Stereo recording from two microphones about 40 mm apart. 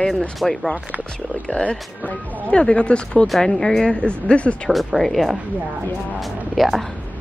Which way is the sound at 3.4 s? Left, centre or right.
Centre.